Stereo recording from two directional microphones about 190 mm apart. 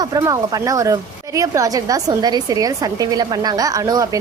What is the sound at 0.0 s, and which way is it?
A woman's voice, 20° right (ahead or behind).